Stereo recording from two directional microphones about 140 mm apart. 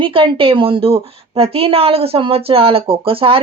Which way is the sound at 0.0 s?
40° right (ahead or behind).